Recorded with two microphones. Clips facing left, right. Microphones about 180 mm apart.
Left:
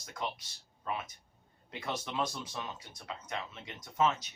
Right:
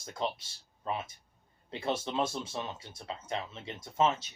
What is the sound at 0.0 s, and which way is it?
Speech, 25° right (ahead or behind).